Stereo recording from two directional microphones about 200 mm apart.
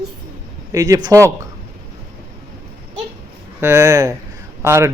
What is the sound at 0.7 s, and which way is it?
Speech, 15° right (ahead or behind).